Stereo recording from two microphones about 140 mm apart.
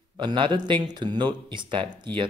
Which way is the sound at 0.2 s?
35° right (ahead or behind).